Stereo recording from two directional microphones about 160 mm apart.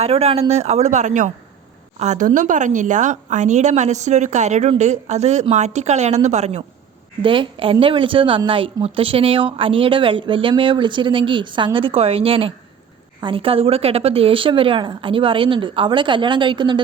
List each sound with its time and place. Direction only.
0.0 s a woman's voice: 40° right (ahead or behind)
7.2 s a woman's voice: 30° right (ahead or behind)